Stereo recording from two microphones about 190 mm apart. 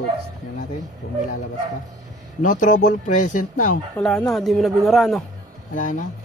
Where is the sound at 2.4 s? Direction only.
45° left (ahead or behind).